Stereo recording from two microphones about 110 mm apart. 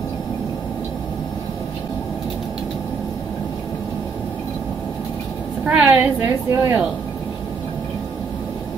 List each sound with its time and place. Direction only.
5.7 s a woman's voice: 15° right (ahead or behind)